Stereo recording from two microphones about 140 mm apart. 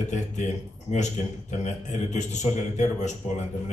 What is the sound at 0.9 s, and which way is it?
A man's voice, 55° left (ahead or behind).